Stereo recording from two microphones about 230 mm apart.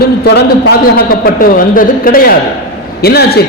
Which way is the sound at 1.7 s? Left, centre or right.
Left.